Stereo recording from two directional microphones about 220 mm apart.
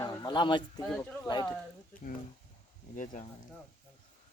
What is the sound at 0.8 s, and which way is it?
Speech, 5° left (ahead or behind).